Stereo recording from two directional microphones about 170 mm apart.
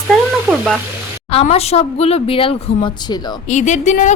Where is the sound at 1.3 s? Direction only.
35° left (ahead or behind).